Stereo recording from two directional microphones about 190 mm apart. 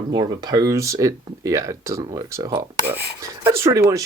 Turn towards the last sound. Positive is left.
turn(degrees=-15)  # may be behind; listen again after turning